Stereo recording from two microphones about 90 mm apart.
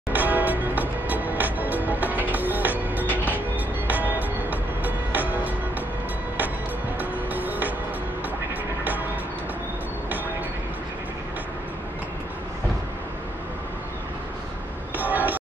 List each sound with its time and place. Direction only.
0.1 s music: 20° right (ahead or behind)
7.0 s music: 20° right (ahead or behind)
15.0 s a sound: 20° right (ahead or behind)